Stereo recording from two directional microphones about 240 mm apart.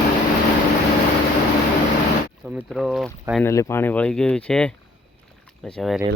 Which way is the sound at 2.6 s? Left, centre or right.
Centre.